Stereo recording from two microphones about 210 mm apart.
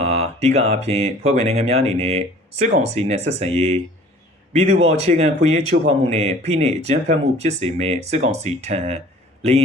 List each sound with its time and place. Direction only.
0.0 s a man's voice: 30° right (ahead or behind)